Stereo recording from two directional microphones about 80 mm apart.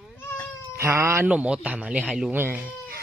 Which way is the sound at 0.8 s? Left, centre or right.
Right.